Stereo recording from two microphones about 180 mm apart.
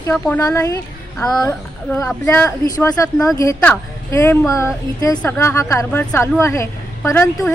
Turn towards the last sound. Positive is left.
turn(degrees=15)  # may be behind; listen again after turning